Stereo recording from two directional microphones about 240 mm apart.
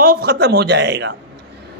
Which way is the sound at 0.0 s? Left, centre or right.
Right.